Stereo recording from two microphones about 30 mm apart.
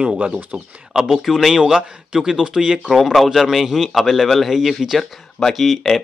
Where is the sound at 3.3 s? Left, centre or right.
Centre.